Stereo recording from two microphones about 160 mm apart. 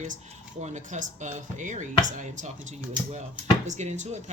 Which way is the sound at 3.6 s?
50° right (ahead or behind).